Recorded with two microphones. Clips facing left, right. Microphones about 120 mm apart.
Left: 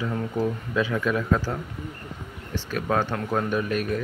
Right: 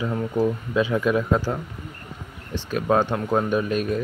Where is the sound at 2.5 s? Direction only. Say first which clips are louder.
Right 4 dB; 20° right (ahead or behind).